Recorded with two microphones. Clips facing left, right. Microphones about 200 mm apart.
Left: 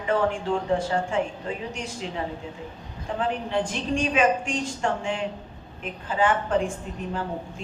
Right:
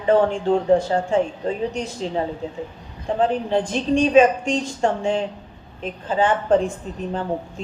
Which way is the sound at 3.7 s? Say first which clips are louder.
Right 10 dB; 40° right (ahead or behind).